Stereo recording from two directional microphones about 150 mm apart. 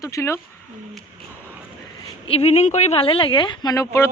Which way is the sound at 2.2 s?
40° left (ahead or behind).